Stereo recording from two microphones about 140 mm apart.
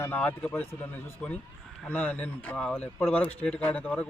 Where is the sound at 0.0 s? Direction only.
10° left (ahead or behind).